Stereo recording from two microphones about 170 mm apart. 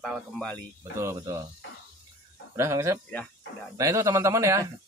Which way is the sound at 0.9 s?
15° right (ahead or behind).